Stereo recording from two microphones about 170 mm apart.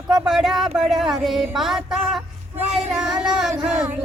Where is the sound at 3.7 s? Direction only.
10° right (ahead or behind).